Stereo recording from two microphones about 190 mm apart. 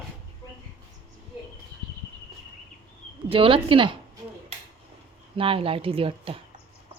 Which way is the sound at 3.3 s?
30° right (ahead or behind).